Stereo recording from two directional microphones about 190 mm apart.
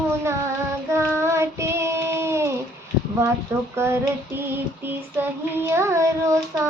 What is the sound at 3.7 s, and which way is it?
Female singing, 10° right (ahead or behind).